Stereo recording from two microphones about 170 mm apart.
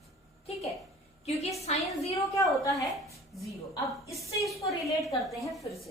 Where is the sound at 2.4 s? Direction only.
20° left (ahead or behind).